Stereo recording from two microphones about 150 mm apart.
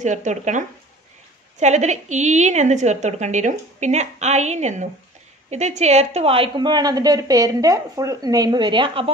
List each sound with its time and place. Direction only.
0.0 s a woman's voice: 55° right (ahead or behind); by 9.1 s 35° right (ahead or behind)